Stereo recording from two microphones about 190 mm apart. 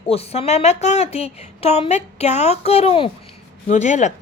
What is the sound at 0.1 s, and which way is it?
Speech, 30° left (ahead or behind).